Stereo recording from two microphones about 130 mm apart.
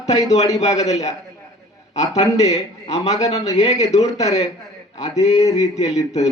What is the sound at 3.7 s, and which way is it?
Speech, 25° left (ahead or behind).